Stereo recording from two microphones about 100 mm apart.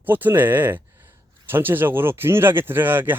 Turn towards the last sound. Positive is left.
turn(degrees=-20)  # may be behind; listen again after turning